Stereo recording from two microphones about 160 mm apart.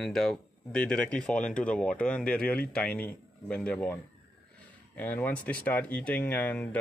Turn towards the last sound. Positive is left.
turn(degrees=10)  # may be behind; listen again after turning